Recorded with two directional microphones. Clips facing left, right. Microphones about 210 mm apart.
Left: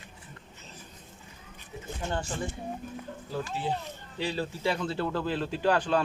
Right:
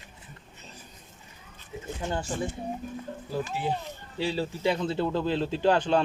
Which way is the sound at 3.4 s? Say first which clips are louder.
Right 1 dB; 15° right (ahead or behind).